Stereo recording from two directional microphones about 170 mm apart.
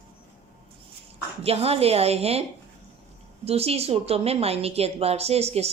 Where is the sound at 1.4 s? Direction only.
35° right (ahead or behind).